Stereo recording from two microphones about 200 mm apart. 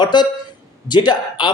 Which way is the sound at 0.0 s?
20° left (ahead or behind).